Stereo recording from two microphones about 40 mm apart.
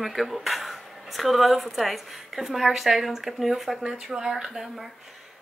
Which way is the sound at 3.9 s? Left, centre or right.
Centre.